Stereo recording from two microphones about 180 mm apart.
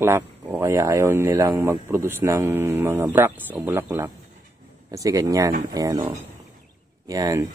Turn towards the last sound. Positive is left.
turn(degrees=-20)  # may be behind; listen again after turning